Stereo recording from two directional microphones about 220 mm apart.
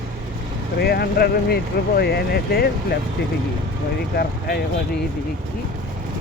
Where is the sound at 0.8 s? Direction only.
45° left (ahead or behind).